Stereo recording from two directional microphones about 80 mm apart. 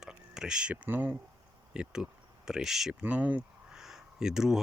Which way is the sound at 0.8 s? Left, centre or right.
Right.